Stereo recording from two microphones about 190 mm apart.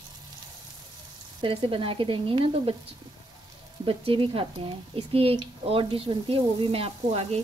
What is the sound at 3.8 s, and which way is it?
A woman's voice, 30° right (ahead or behind).